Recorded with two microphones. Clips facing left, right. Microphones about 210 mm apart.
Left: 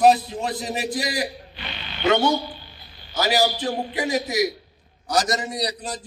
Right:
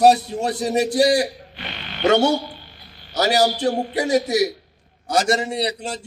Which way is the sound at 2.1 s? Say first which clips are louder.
Right 3 dB; 75° right (ahead or behind).